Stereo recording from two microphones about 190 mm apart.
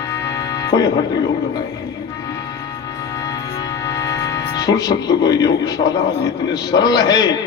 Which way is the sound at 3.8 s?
20° left (ahead or behind).